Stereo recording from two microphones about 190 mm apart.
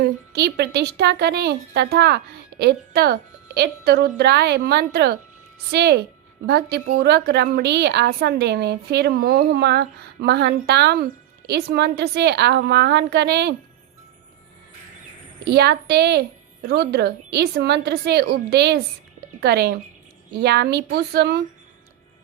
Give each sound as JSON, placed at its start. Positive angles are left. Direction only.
{"t": 0.0, "sound": "a woman's voice", "side_deg": -60}
{"t": 15.4, "sound": "a woman's voice", "side_deg": -60}